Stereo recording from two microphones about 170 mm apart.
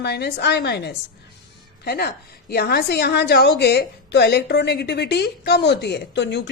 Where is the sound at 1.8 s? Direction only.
65° left (ahead or behind); by 6.4 s 85° left.